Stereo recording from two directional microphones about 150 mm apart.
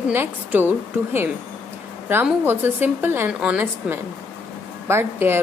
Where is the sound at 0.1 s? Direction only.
15° right (ahead or behind).